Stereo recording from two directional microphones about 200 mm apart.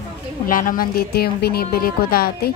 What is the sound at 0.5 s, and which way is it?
A woman's voice, 45° left (ahead or behind).